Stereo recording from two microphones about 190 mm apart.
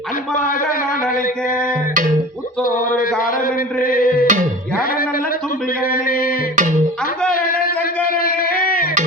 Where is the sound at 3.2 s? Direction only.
50° left (ahead or behind).